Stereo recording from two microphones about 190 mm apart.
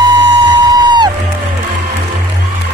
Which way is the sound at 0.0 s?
20° right (ahead or behind).